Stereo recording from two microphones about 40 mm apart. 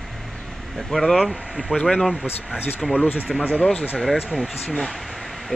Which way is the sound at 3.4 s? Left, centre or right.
Left.